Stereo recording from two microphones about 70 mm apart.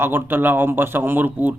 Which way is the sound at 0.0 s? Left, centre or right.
Right.